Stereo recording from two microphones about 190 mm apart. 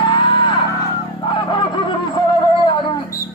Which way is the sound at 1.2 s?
25° left (ahead or behind).